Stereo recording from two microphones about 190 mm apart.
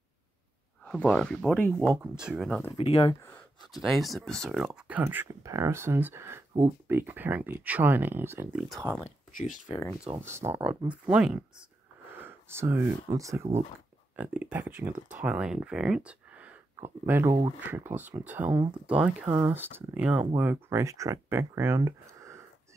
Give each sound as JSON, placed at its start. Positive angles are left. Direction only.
{"t": 0.8, "sound": "speech", "side_deg": 5}
{"t": 2.7, "sound": "speech", "side_deg": 30}
{"t": 3.7, "sound": "speech", "side_deg": 0}
{"t": 9.7, "sound": "speech", "side_deg": 15}
{"t": 10.2, "sound": "speech", "side_deg": -15}